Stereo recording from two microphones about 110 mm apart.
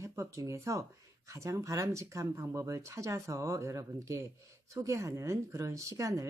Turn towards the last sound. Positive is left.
turn(degrees=-30)  # may be behind; listen again after turning